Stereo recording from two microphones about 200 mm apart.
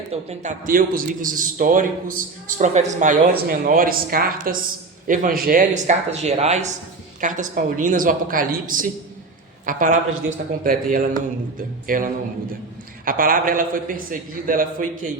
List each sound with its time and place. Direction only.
0.1 s a man's voice: 35° right (ahead or behind)
13.1 s a man's voice: 45° right (ahead or behind)